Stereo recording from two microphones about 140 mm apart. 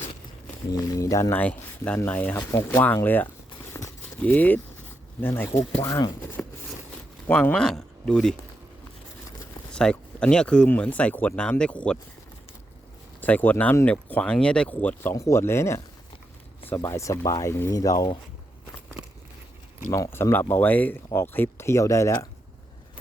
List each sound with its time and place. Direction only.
0.7 s speech: 25° left (ahead or behind)
3.7 s a sound: 20° left (ahead or behind)
4.2 s speech: 10° left (ahead or behind)
7.3 s speech: 10° left (ahead or behind)
9.7 s speech: 5° left (ahead or behind)
13.2 s speech: 10° left (ahead or behind)
19.9 s speech: 20° left (ahead or behind)